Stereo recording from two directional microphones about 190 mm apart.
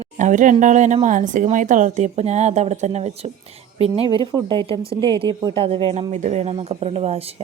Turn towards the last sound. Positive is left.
turn(degrees=-30)  # may be behind; listen again after turning